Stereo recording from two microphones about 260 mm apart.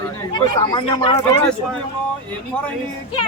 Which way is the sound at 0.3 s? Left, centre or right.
Centre.